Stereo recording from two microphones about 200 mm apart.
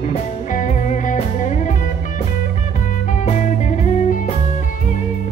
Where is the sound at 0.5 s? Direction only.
35° left (ahead or behind).